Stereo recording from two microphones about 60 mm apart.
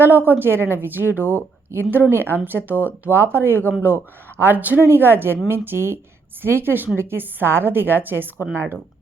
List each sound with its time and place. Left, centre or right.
0.0 s a woman's voice: right